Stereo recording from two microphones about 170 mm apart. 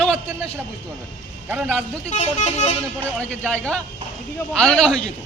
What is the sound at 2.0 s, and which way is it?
Speech, 40° left (ahead or behind).